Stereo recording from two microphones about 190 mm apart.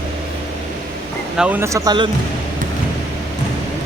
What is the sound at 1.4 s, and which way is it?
Speech, 10° right (ahead or behind).